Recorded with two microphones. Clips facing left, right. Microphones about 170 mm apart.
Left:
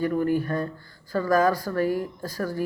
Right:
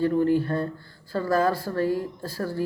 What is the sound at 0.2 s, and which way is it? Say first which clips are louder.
Speech: right 3 dB; 25° right (ahead or behind).